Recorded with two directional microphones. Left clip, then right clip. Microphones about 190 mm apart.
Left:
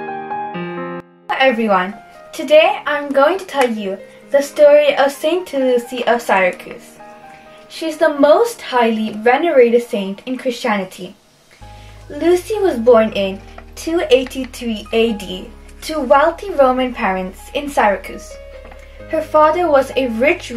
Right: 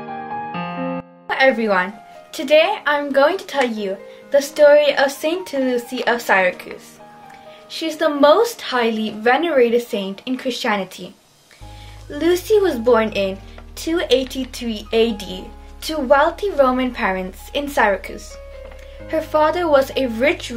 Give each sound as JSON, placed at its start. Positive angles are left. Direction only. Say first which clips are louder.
{"t": 0.5, "sound": "music", "louder": "even", "side_deg": -5}
{"t": 2.3, "sound": "speech", "louder": "left 4 dB", "side_deg": -10}
{"t": 7.7, "sound": "speech", "louder": "left 4 dB", "side_deg": -15}
{"t": 12.2, "sound": "speech", "louder": "left 1 dB", "side_deg": -15}